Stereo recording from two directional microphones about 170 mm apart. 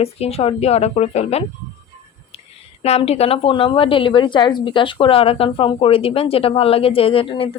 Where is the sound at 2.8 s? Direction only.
35° left (ahead or behind).